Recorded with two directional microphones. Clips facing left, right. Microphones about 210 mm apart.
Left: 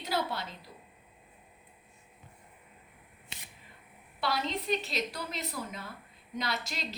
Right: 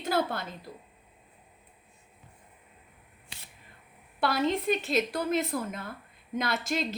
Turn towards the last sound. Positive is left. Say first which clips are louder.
# right 6 dB
turn(degrees=-50)  # may be behind; listen again after turning